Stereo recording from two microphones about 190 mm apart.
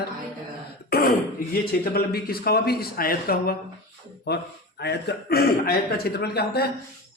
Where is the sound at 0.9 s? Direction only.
50° left (ahead or behind).